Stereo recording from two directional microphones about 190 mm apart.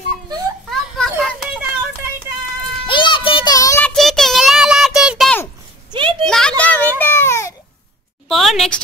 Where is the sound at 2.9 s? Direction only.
25° left (ahead or behind).